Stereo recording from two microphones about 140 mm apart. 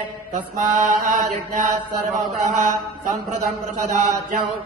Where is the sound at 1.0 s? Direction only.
60° right (ahead or behind).